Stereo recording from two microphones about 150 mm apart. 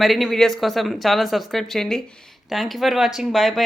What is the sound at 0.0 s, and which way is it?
A woman's voice, centre (ahead or behind).